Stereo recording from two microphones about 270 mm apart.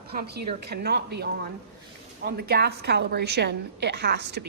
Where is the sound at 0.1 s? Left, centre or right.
Right.